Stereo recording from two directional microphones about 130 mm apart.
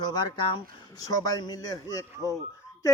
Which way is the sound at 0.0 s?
30° left (ahead or behind).